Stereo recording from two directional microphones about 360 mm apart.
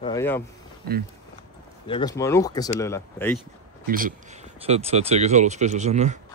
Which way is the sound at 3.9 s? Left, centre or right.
Right.